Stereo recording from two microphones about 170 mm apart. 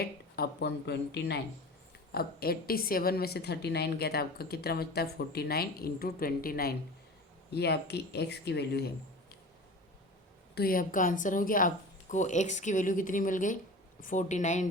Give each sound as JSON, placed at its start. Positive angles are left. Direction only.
{"t": 0.0, "sound": "speech", "side_deg": 65}
{"t": 2.1, "sound": "a woman's voice", "side_deg": 65}
{"t": 7.5, "sound": "speech", "side_deg": 75}
{"t": 10.5, "sound": "speech", "side_deg": 60}